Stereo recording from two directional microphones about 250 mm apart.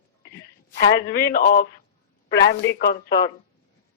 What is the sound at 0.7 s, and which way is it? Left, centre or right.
A man's voice, left.